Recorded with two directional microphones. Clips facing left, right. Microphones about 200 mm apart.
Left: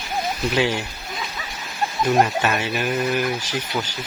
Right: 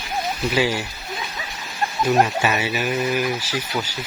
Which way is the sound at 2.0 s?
5° right (ahead or behind).